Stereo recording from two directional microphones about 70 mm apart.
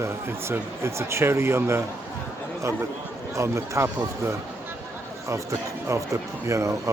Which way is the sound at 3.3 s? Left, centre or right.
Right.